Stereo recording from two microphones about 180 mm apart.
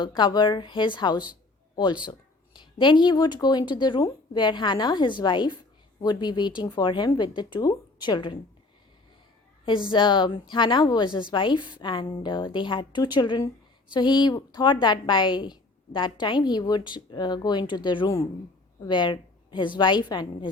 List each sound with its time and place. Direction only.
0.0 s a woman's voice: 25° left (ahead or behind)
9.9 s a woman's voice: 25° left (ahead or behind)